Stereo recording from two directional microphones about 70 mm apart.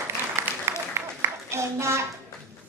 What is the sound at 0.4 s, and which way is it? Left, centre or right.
Applause, right.